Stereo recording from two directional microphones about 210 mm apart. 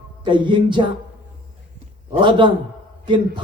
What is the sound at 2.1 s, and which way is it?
Speech, 25° right (ahead or behind).